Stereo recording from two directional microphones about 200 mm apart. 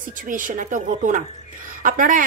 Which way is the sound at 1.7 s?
40° right (ahead or behind).